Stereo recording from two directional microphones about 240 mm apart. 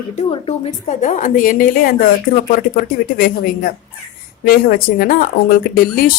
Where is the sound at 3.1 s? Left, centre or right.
Left.